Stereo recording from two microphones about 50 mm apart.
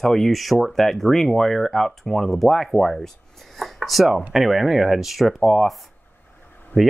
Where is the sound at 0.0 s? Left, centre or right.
Centre.